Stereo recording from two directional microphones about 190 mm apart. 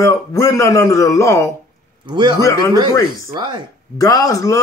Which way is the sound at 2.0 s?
25° right (ahead or behind).